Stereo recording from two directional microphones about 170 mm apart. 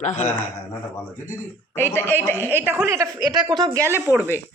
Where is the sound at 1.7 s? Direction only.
15° left (ahead or behind).